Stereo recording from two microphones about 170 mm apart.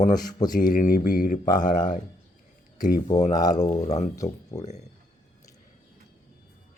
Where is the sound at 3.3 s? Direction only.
25° left (ahead or behind).